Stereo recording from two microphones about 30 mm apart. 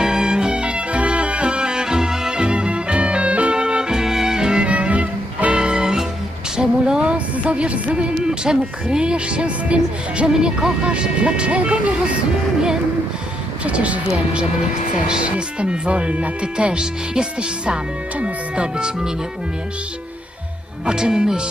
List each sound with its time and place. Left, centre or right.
0.0 s music: right
2.4 s music: right
3.5 s music: right
4.7 s music: right
5.5 s music: right
6.6 s a sound: right
7.0 s music: right
8.3 s speech: right
10.2 s speech: right
10.8 s speech: right
13.7 s speech: right
15.0 s speech: right
20.8 s speech: right